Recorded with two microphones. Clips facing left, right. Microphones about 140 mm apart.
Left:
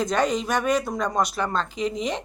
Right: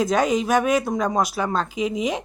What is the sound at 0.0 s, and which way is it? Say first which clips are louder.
Speech: right 3 dB; 5° right (ahead or behind).